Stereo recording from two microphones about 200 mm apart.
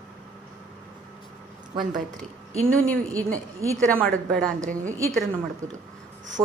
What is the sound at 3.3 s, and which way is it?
Speech, 15° right (ahead or behind).